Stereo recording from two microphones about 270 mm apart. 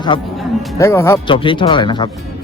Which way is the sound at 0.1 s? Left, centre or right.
Centre.